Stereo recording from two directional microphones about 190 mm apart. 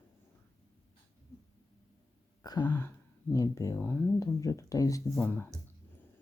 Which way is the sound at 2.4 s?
20° left (ahead or behind).